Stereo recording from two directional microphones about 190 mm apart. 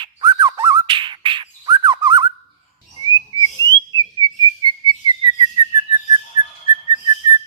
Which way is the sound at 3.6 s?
20° right (ahead or behind).